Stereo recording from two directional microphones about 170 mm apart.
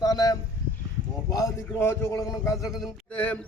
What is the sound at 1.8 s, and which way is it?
Speech, 15° left (ahead or behind).